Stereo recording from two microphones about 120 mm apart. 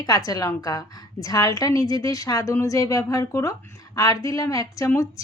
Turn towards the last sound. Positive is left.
turn(degrees=25)  # may be behind; listen again after turning